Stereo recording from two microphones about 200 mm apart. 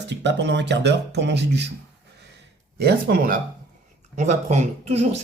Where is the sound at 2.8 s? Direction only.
50° right (ahead or behind).